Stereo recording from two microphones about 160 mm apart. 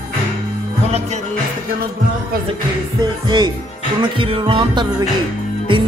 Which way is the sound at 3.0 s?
25° right (ahead or behind).